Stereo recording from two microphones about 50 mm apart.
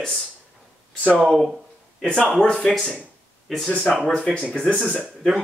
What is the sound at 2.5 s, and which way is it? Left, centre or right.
Speech, centre.